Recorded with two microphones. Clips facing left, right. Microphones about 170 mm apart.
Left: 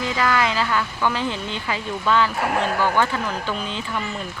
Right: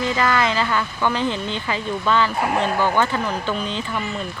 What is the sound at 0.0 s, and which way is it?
Speech, centre (ahead or behind).